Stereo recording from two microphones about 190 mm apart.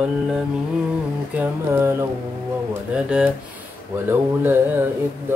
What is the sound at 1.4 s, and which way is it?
Mantra, 15° right (ahead or behind).